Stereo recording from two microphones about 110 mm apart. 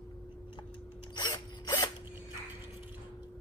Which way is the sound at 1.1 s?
40° left (ahead or behind).